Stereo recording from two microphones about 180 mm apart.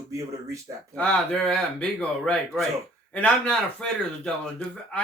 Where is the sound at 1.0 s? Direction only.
5° left (ahead or behind).